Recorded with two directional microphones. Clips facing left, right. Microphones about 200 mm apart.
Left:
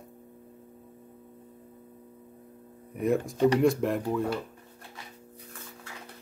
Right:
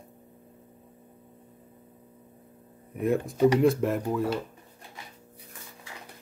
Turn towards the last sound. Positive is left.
turn(degrees=0)  # may be behind; listen again after turning